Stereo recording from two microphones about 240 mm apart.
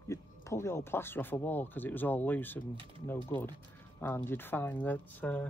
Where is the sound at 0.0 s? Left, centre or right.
Centre.